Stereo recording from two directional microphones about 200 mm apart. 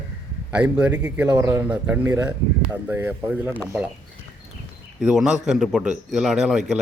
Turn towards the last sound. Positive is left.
turn(degrees=0)  # may be behind; listen again after turning